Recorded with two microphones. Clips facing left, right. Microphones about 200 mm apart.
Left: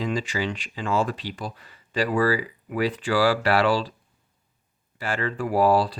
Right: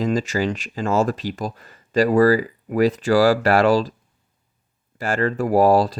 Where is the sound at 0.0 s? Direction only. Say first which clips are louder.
Right 6 dB; 45° right (ahead or behind).